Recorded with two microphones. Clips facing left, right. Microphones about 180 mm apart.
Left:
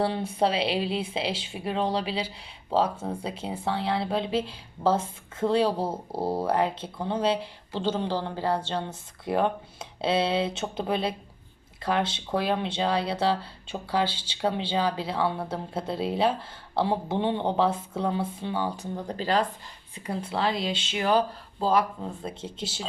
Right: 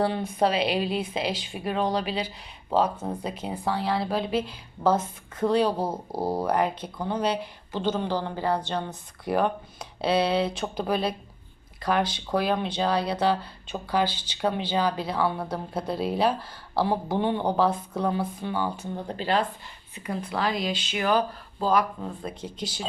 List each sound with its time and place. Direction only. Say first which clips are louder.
0.0 s speech: right 1 dB; 30° left (ahead or behind)